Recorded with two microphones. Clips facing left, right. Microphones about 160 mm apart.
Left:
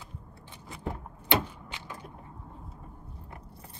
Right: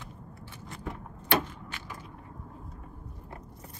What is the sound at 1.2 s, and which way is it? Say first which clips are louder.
Vehicle: right 1 dB; 15° left (ahead or behind).